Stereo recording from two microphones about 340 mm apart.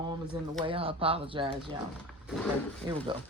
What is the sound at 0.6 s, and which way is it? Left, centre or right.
Speech, centre.